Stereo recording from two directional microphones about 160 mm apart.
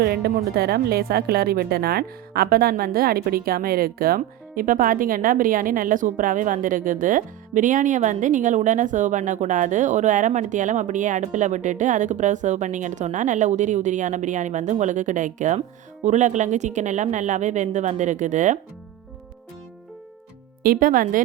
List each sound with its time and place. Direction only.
0.0 s a woman's voice: 75° right (ahead or behind); by 18.6 s 50° right (ahead or behind)
20.6 s speech: 60° right (ahead or behind)